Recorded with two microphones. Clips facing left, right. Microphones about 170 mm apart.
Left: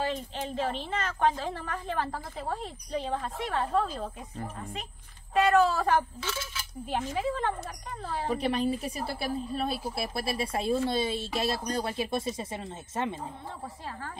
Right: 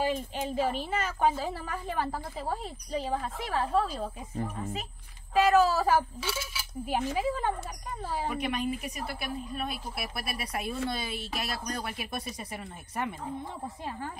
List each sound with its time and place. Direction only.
0.0 s a woman's voice: 10° right (ahead or behind)
5.3 s a woman's voice: centre (ahead or behind)
8.3 s a woman's voice: 30° left (ahead or behind)